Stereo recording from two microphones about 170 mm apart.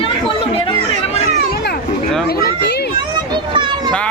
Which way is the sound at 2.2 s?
65° left (ahead or behind).